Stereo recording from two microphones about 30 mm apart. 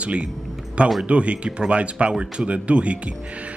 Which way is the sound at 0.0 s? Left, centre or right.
Right.